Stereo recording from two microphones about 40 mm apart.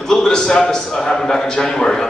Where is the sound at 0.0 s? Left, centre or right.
Centre.